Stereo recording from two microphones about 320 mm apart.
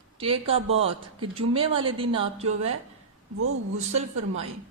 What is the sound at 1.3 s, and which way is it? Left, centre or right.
Speech, centre.